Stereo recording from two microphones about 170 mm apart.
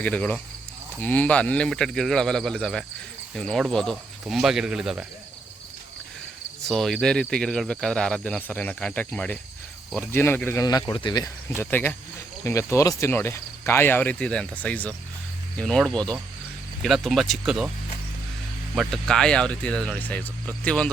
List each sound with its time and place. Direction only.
0.0 s speech: 10° left (ahead or behind)
6.7 s speech: centre (ahead or behind); by 11.3 s 25° left (ahead or behind)
11.5 s speech: 10° left (ahead or behind); by 17.7 s 5° right (ahead or behind)
18.7 s speech: centre (ahead or behind)